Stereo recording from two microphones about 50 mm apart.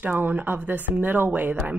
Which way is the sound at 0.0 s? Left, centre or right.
Right.